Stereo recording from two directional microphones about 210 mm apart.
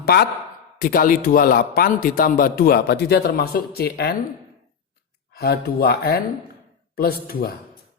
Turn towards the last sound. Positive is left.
turn(degrees=45)  # may be behind; listen again after turning